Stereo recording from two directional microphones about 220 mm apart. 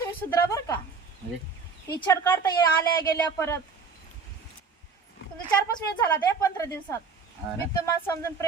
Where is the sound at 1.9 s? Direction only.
10° left (ahead or behind).